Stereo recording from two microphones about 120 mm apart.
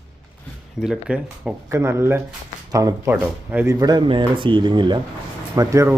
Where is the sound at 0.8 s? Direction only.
5° right (ahead or behind).